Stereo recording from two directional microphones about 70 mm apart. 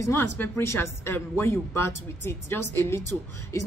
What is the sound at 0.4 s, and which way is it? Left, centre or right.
A woman's voice, left.